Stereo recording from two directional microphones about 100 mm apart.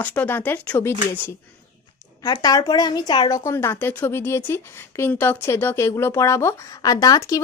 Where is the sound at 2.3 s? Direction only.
40° left (ahead or behind).